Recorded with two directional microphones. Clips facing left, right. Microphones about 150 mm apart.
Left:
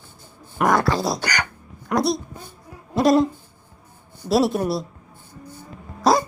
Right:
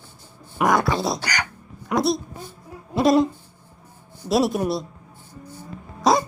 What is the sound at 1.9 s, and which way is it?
A woman's voice, centre (ahead or behind).